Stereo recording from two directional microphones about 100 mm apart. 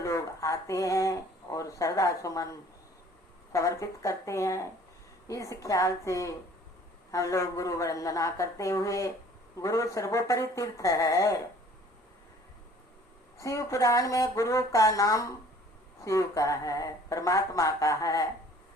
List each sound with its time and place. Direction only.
0.0 s speech: 30° left (ahead or behind)
13.4 s speech: 30° left (ahead or behind)